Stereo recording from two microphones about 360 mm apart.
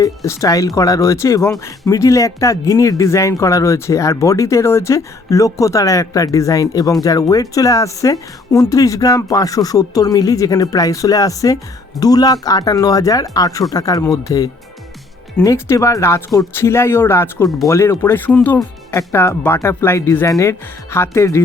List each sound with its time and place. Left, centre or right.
0.0 s speech: centre